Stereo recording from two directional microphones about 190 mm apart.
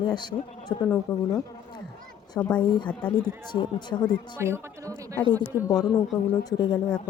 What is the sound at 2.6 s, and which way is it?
Speech, 25° left (ahead or behind).